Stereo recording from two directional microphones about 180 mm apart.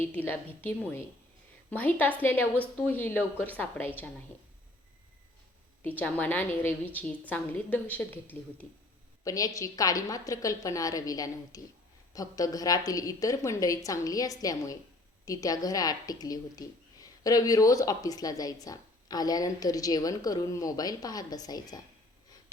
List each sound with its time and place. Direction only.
0.0 s a woman's voice: 10° left (ahead or behind)
5.8 s a woman's voice: 10° left (ahead or behind)